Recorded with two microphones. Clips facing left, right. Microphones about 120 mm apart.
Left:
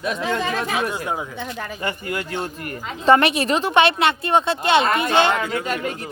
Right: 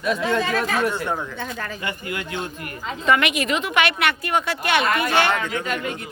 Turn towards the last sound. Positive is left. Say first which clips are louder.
# left 2 dB
turn(degrees=40)  # may be behind; listen again after turning